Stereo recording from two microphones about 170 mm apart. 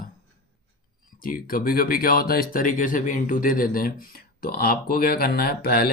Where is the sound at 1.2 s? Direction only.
55° left (ahead or behind).